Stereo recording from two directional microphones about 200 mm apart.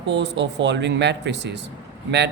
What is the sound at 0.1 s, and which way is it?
Speech, 60° right (ahead or behind).